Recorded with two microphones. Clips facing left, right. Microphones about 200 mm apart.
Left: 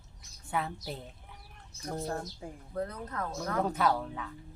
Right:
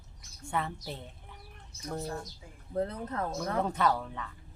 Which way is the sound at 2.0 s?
55° left (ahead or behind).